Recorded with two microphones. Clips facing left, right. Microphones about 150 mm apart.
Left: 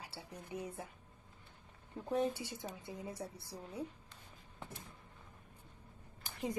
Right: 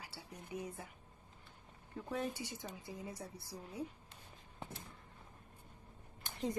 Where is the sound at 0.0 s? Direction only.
25° left (ahead or behind).